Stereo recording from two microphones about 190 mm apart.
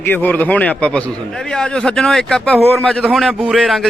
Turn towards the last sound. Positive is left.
turn(degrees=0)  # may be behind; listen again after turning